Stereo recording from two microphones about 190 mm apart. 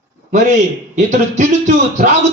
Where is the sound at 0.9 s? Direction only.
40° right (ahead or behind).